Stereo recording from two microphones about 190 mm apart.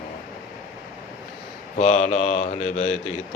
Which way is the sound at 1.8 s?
40° left (ahead or behind).